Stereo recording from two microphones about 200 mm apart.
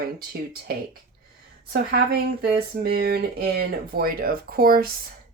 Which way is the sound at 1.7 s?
50° right (ahead or behind).